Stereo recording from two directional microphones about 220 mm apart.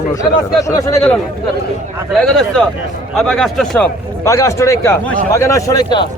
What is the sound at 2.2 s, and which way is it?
A man's voice, 5° left (ahead or behind).